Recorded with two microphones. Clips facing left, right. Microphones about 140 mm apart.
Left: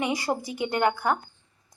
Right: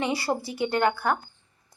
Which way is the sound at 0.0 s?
15° left (ahead or behind).